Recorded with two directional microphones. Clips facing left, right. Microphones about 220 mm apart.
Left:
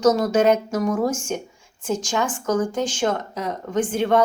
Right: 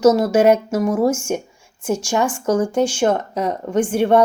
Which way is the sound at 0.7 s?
25° right (ahead or behind).